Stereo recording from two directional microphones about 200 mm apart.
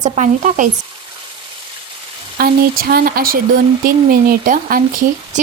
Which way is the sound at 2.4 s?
50° right (ahead or behind).